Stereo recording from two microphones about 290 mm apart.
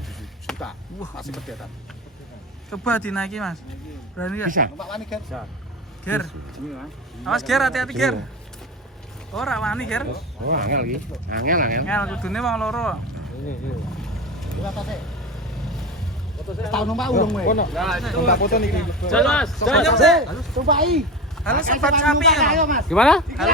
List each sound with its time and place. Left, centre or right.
0.4 s speech: centre
2.6 s speech: centre
9.3 s speech: centre
10.4 s speech: right
11.9 s speech: centre
14.0 s vehicle: centre
16.6 s speech: centre
17.4 s speech: left
17.7 s speech: centre
18.3 s speech: left
18.8 s speech: centre
21.5 s speech: right
22.0 s speech: centre